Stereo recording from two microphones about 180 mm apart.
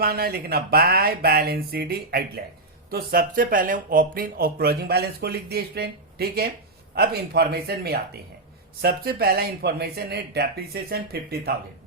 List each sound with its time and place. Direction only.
0.0 s speech: 60° right (ahead or behind)